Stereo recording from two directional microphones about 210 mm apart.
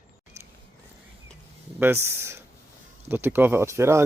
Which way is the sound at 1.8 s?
10° right (ahead or behind).